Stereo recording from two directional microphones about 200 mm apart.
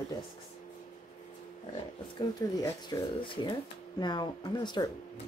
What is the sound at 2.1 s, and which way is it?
Speech, 20° left (ahead or behind).